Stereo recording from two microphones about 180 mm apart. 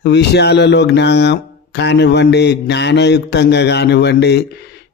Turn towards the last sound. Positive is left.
turn(degrees=65)  # may be behind; listen again after turning